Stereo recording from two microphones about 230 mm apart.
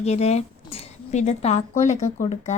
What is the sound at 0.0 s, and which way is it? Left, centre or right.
A woman's voice, left.